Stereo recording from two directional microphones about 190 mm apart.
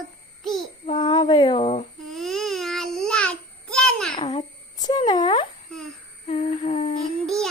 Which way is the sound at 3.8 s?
5° left (ahead or behind).